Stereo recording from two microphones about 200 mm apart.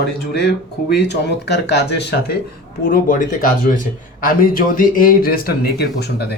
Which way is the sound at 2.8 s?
45° left (ahead or behind).